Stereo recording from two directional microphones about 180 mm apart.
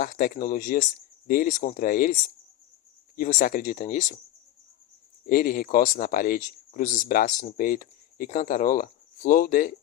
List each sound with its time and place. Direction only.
0.0 s speech: 50° left (ahead or behind)
3.2 s speech: 50° left (ahead or behind)
5.2 s speech: 55° left (ahead or behind)